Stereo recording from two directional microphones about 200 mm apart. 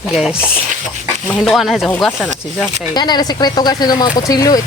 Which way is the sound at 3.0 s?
20° left (ahead or behind).